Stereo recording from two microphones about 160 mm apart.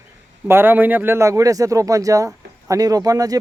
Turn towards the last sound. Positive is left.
turn(degrees=-20)  # may be behind; listen again after turning